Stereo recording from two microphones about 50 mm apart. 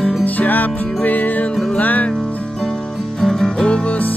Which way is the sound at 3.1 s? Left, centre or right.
Centre.